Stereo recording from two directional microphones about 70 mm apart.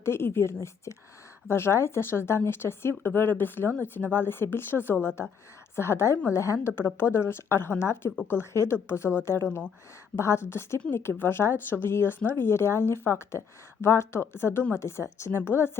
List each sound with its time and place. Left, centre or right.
0.0 s speech: left